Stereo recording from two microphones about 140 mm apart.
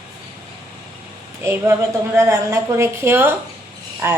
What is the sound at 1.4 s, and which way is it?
A woman's voice, 20° right (ahead or behind).